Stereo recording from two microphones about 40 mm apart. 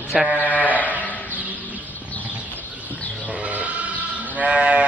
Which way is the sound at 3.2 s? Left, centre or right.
Right.